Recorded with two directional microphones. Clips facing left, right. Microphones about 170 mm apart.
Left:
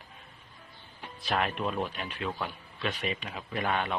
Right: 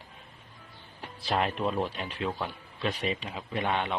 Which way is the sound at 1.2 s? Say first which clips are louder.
Right 2 dB; 30° right (ahead or behind).